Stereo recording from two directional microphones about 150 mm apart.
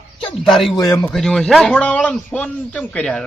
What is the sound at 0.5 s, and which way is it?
Snicker, centre (ahead or behind).